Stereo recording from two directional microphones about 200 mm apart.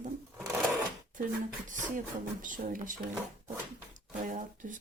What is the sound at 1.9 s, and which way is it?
Speech, 40° right (ahead or behind).